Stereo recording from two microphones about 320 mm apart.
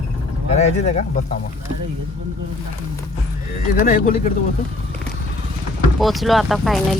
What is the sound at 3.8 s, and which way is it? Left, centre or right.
Speech, left.